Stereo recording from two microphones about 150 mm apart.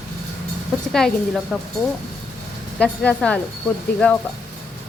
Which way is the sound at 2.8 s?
10° left (ahead or behind).